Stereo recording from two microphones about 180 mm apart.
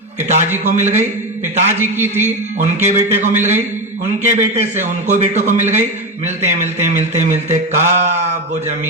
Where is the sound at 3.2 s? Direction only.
40° right (ahead or behind).